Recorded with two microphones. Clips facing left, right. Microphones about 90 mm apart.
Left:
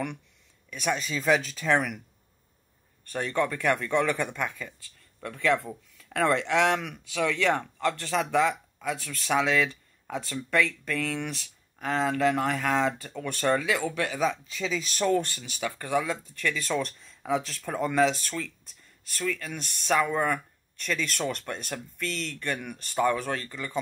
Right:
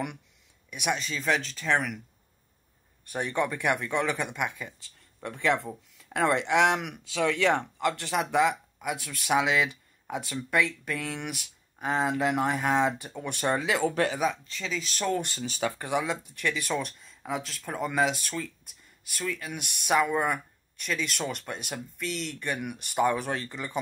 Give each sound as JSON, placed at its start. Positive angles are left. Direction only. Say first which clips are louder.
{"t": 0.7, "sound": "speech", "louder": "left 1 dB", "side_deg": -10}
{"t": 0.9, "sound": "speech", "louder": "left 5 dB", "side_deg": 0}
{"t": 3.1, "sound": "speech", "louder": "left 1 dB", "side_deg": -15}
{"t": 14.2, "sound": "speech", "louder": "left 1 dB", "side_deg": 0}
{"t": 15.4, "sound": "speech", "louder": "right 3 dB", "side_deg": -30}